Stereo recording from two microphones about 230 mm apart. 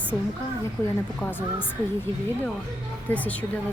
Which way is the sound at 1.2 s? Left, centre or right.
Centre.